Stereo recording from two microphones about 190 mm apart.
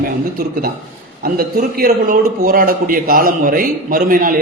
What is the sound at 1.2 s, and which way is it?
A man's voice, 50° right (ahead or behind).